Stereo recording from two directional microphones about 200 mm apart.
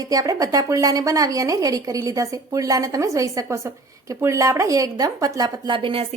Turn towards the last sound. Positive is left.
turn(degrees=-30)  # may be behind; listen again after turning